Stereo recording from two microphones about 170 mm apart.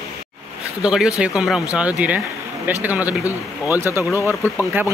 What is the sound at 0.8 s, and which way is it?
Speech, 5° right (ahead or behind).